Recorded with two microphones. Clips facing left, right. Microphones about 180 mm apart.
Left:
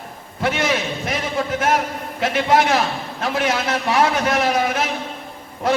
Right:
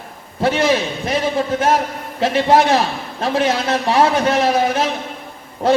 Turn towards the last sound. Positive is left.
turn(degrees=-30)  # may be behind; listen again after turning